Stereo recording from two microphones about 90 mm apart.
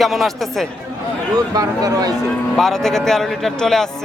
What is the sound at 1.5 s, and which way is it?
Speech, 45° right (ahead or behind).